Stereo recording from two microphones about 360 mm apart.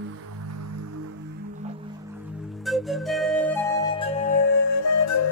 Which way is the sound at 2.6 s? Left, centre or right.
Centre.